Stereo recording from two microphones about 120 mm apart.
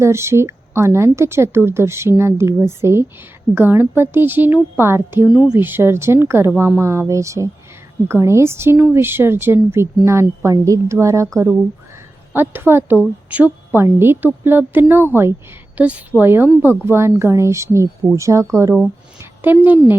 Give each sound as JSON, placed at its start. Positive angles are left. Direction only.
{"t": 0.0, "sound": "a woman's voice", "side_deg": -20}
{"t": 5.3, "sound": "a woman's voice", "side_deg": -5}
{"t": 5.5, "sound": "a woman's voice", "side_deg": -15}
{"t": 12.3, "sound": "a woman's voice", "side_deg": -20}